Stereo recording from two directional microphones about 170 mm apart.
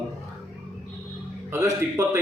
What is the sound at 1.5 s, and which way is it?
Speech, 15° right (ahead or behind).